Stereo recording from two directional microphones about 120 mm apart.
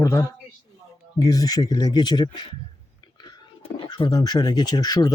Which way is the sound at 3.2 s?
50° left (ahead or behind).